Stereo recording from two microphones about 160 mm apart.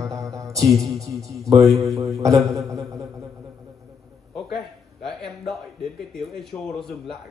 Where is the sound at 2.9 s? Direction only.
20° right (ahead or behind).